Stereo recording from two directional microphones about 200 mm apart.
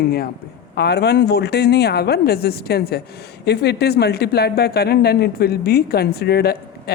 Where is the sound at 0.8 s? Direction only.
55° left (ahead or behind).